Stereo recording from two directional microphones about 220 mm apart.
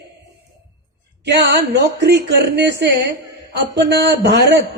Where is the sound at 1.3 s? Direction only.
50° right (ahead or behind).